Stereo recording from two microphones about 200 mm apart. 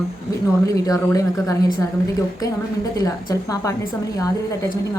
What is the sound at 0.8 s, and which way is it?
Speech, 15° left (ahead or behind).